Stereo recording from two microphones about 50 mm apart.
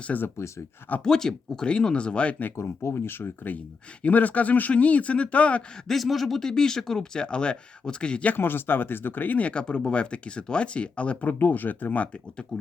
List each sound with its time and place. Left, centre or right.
0.3 s speech: left
1.0 s speech: centre
2.6 s speech: left
5.9 s speech: centre
8.4 s speech: left
9.5 s speech: left
11.3 s speech: left